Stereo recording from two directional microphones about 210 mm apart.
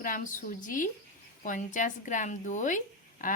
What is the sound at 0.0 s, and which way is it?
Speech, 40° left (ahead or behind).